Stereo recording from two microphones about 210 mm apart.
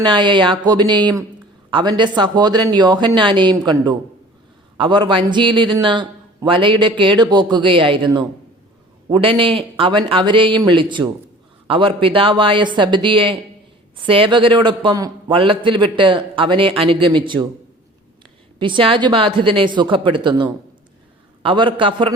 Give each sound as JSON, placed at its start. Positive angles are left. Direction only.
{"t": 0.0, "sound": "a man's voice", "side_deg": -20}
{"t": 4.8, "sound": "a man's voice", "side_deg": -20}
{"t": 18.6, "sound": "a man's voice", "side_deg": -25}